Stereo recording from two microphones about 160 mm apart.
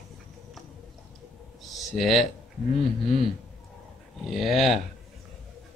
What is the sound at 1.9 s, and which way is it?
Speech, centre (ahead or behind).